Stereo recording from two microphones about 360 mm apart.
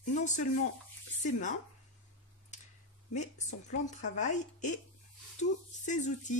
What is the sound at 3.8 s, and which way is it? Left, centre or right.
Speech, centre.